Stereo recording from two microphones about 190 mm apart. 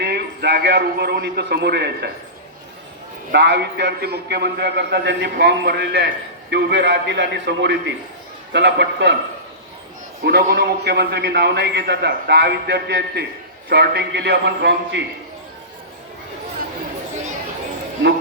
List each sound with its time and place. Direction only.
0.0 s a man's voice: 60° right (ahead or behind)
3.3 s a man's voice: 65° right (ahead or behind)
10.2 s a man's voice: 60° right (ahead or behind)